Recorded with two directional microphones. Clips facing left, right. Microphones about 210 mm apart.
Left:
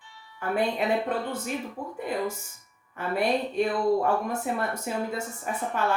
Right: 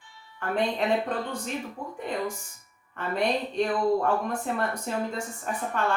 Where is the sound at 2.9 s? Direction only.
5° left (ahead or behind).